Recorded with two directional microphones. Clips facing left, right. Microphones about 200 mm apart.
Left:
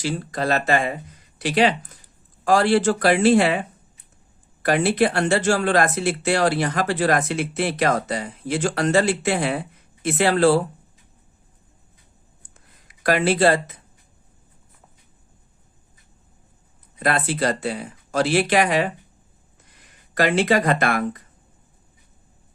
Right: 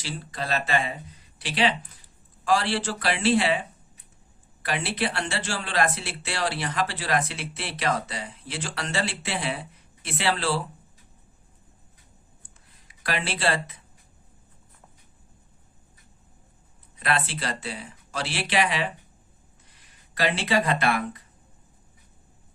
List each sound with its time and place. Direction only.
0.0 s speech: 45° left (ahead or behind)
12.4 s a sound: 45° left (ahead or behind)
17.0 s speech: 45° left (ahead or behind)
20.1 s speech: 45° left (ahead or behind)